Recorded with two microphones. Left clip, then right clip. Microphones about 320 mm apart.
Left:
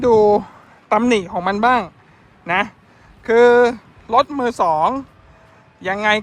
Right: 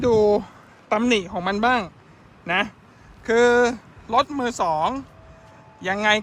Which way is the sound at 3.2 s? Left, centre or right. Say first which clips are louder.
Left 6 dB; centre.